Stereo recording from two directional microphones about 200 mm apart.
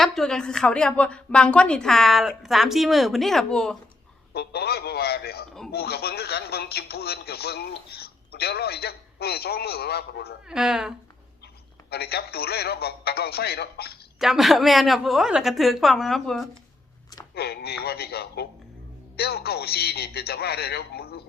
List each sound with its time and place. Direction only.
0.0 s a woman's voice: centre (ahead or behind)
4.4 s speech: 55° left (ahead or behind)
10.5 s a woman's voice: 5° right (ahead or behind)
11.9 s speech: 55° left (ahead or behind)
14.2 s a woman's voice: centre (ahead or behind)
17.3 s speech: 50° left (ahead or behind)